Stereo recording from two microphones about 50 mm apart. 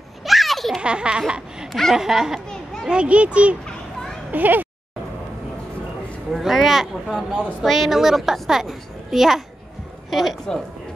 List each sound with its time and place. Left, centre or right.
0.2 s a sound: centre
0.8 s a child's voice: centre
1.2 s laughter: centre
1.7 s laughter: centre
2.0 s a woman's voice: centre
2.9 s a child's voice: right
4.3 s speech: right
6.3 s a woman's voice: centre